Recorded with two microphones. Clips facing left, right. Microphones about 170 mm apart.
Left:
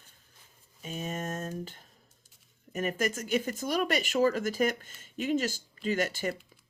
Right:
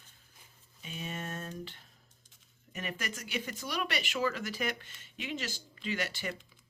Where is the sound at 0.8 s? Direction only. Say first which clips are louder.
Left 5 dB; 45° left (ahead or behind).